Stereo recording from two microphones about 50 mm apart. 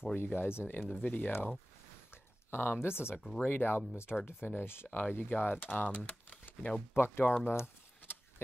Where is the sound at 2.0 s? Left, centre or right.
Left.